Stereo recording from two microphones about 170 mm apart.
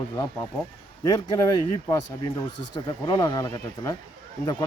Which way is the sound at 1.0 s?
25° left (ahead or behind).